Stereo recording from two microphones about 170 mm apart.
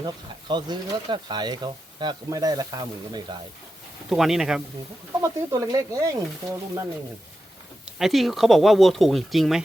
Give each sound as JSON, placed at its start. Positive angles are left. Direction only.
{"t": 0.0, "sound": "speech", "side_deg": -25}
{"t": 4.1, "sound": "speech", "side_deg": -5}
{"t": 5.2, "sound": "speech", "side_deg": -20}
{"t": 7.9, "sound": "speech", "side_deg": 0}